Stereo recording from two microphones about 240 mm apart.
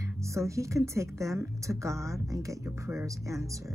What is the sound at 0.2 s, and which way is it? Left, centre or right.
Speech, centre.